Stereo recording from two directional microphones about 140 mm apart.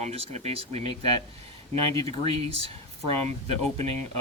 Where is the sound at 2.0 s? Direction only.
45° right (ahead or behind).